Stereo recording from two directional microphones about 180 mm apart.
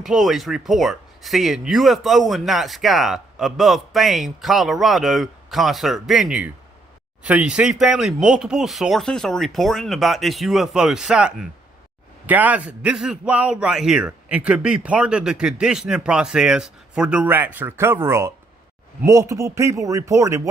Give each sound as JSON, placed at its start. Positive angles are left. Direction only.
{"t": 0.0, "sound": "a man's voice", "side_deg": 0}